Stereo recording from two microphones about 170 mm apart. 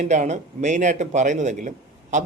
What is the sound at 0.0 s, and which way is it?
Speech, 45° right (ahead or behind).